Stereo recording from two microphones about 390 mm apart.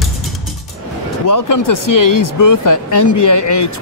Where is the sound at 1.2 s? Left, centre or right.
Left.